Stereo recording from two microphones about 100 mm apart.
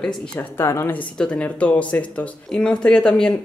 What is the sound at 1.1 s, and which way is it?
Speech, 10° left (ahead or behind).